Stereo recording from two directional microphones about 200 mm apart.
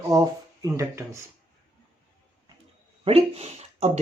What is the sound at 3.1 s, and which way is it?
Speech, 30° right (ahead or behind).